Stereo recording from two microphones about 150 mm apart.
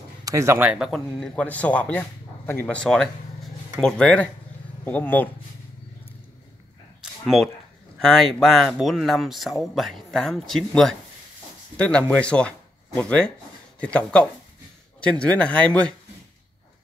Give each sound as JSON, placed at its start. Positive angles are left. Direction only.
{"t": 0.2, "sound": "speech", "side_deg": -20}
{"t": 0.7, "sound": "speech", "side_deg": -5}
{"t": 7.0, "sound": "a sound", "side_deg": 0}
{"t": 8.0, "sound": "speech", "side_deg": 0}